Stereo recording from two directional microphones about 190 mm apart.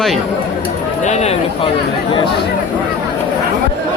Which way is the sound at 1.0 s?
35° left (ahead or behind).